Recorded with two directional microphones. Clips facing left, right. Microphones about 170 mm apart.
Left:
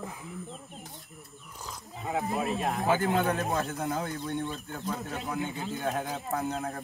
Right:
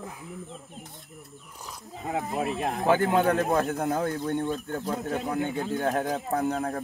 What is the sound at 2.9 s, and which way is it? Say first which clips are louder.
Speech: right 5 dB; 60° right (ahead or behind).